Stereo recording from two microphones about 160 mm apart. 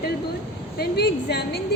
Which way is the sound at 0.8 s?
90° left.